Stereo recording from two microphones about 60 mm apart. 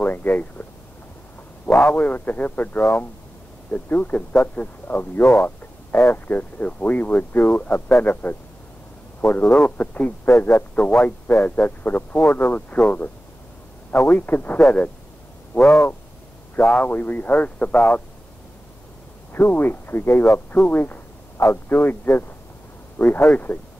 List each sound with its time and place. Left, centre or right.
0.0 s a sound: left
1.9 s a man's voice: left
5.2 s speech: centre
6.0 s a man's voice: left
16.5 s a man's voice: left
19.3 s a man's voice: left